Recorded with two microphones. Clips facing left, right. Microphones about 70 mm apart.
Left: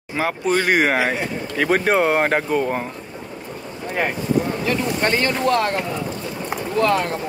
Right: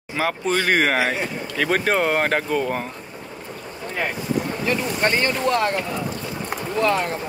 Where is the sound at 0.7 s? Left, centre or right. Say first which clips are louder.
Even; centre.